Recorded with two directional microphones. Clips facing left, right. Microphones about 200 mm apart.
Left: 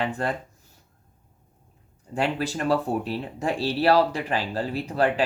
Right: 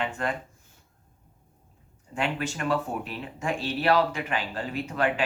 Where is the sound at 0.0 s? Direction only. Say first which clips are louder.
Left 3 dB; 35° left (ahead or behind).